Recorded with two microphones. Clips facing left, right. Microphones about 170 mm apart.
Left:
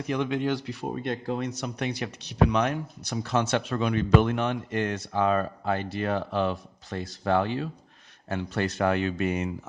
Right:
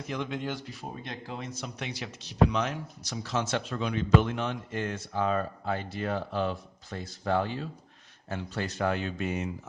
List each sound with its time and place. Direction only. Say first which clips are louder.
0.1 s speech: left 7 dB; 65° left (ahead or behind)